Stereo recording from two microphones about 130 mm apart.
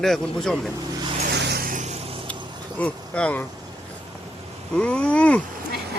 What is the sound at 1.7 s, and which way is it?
Vehicle, 70° right (ahead or behind).